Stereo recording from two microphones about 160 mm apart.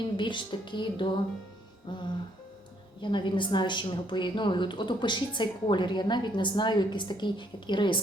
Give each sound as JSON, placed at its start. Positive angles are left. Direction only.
{"t": 0.2, "sound": "a woman's voice", "side_deg": 30}